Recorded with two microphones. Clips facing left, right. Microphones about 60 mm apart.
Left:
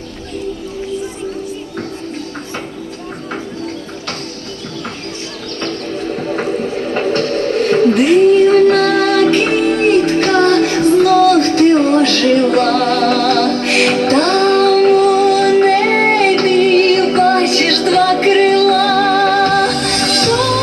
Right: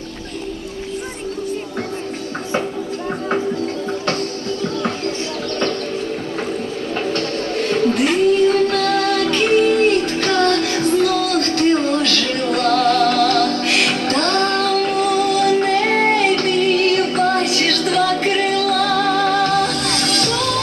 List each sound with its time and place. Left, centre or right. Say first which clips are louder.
6.9 s music: left 5 dB; left